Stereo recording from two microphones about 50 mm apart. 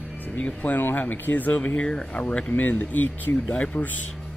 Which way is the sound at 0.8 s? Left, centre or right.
Left.